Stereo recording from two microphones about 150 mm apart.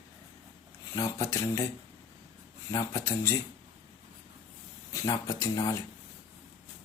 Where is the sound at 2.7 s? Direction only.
20° left (ahead or behind).